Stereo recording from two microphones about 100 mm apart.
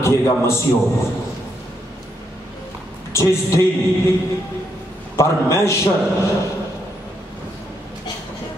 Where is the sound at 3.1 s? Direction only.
30° left (ahead or behind).